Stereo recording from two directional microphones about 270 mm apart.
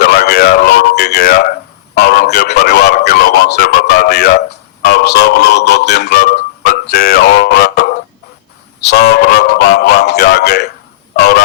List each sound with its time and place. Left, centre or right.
0.0 s a sound: left
4.9 s music: left
11.2 s fowl: left